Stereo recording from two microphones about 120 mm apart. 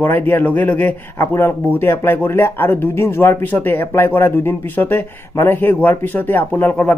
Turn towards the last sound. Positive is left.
turn(degrees=15)  # may be behind; listen again after turning